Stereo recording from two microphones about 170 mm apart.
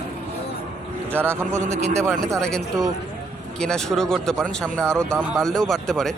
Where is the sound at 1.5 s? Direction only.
45° right (ahead or behind).